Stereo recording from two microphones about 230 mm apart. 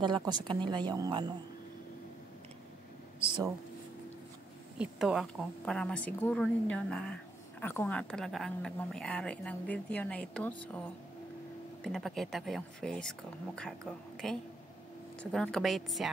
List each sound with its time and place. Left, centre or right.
0.0 s speech: centre
4.7 s a woman's voice: centre